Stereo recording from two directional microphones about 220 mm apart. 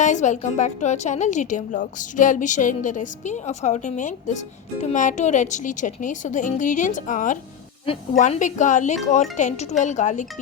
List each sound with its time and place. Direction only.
0.0 s a woman's voice: 35° left (ahead or behind)